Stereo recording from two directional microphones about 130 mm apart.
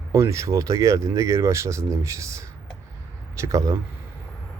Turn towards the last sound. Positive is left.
turn(degrees=-25)  # may be behind; listen again after turning